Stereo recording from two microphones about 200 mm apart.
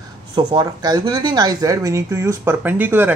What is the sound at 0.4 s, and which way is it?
Speech, 20° right (ahead or behind).